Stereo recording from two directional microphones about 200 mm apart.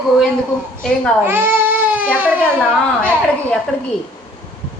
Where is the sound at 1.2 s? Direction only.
10° right (ahead or behind).